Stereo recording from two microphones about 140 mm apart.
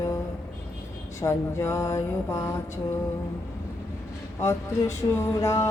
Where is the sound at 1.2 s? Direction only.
20° left (ahead or behind).